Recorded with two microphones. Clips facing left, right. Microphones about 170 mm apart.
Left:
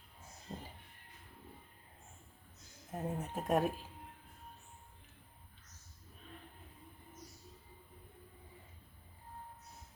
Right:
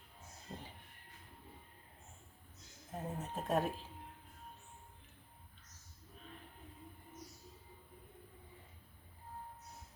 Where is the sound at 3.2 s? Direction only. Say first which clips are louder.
Left 2 dB; 15° left (ahead or behind).